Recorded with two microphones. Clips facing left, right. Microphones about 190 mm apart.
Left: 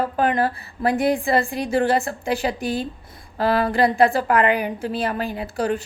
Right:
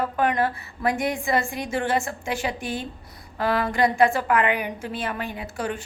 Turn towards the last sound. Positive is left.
turn(degrees=35)  # may be behind; listen again after turning